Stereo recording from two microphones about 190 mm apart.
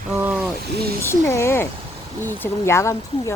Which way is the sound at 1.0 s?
15° left (ahead or behind).